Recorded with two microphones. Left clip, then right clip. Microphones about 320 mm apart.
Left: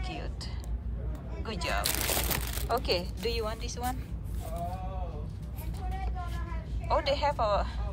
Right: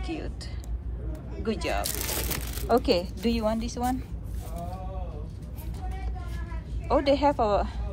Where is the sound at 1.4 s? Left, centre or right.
Centre.